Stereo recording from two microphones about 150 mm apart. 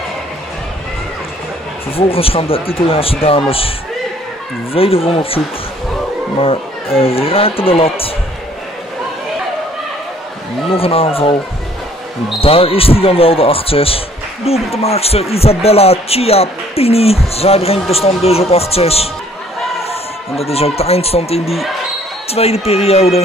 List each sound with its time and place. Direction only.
2.0 s speech: 40° left (ahead or behind)
4.7 s speech: 40° left (ahead or behind)
6.4 s speech: 40° left (ahead or behind)
10.7 s speech: 40° left (ahead or behind)
12.4 s speech: 40° left (ahead or behind)